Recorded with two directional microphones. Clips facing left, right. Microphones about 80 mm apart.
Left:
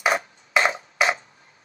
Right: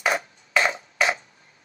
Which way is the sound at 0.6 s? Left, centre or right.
Left.